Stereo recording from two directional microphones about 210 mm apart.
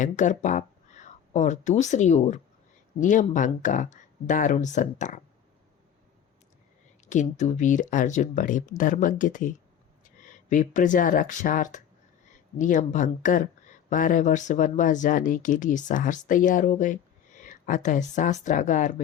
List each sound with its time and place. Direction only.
0.0 s speech: 35° left (ahead or behind)
7.1 s speech: 35° left (ahead or behind)